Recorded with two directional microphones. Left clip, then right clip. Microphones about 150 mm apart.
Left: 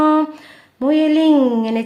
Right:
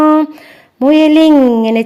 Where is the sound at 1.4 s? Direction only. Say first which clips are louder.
Right 7 dB; 35° right (ahead or behind).